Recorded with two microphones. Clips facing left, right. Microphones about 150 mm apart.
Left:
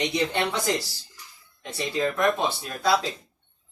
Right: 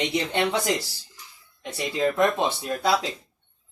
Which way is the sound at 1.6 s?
20° right (ahead or behind).